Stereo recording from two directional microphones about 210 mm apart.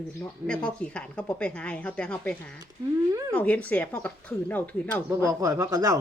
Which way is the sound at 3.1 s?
15° right (ahead or behind).